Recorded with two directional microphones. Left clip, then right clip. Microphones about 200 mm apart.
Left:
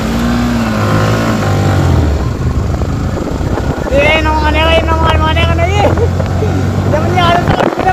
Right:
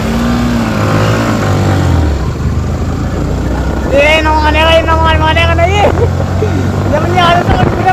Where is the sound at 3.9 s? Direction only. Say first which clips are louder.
Right 2 dB; 5° right (ahead or behind).